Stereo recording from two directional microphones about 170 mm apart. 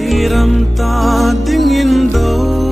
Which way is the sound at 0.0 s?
Centre (ahead or behind).